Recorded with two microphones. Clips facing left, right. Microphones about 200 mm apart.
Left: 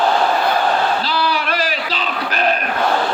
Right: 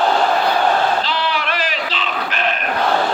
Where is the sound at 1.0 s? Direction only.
40° left (ahead or behind).